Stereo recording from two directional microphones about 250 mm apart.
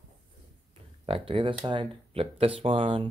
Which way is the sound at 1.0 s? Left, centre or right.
Right.